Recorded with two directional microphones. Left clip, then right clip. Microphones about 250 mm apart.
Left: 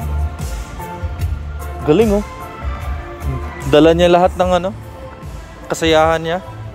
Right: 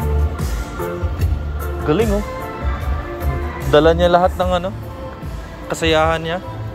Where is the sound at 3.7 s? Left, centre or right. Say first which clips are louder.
Left 2 dB; left.